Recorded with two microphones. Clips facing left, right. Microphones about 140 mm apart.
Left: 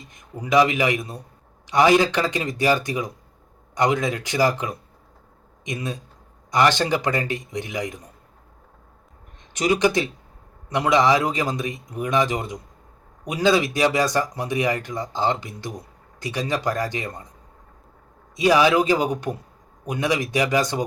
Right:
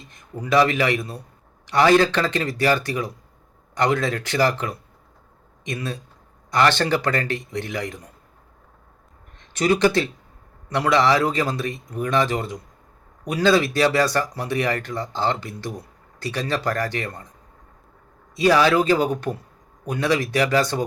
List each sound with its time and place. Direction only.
0.1 s speech: 15° left (ahead or behind)
9.4 s speech: 15° left (ahead or behind)
18.3 s speech: 15° left (ahead or behind)